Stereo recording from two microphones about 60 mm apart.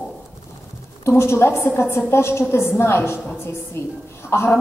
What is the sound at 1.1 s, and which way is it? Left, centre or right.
A woman's voice, left.